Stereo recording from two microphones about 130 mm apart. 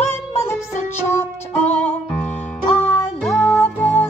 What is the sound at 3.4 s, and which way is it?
Music, 15° left (ahead or behind).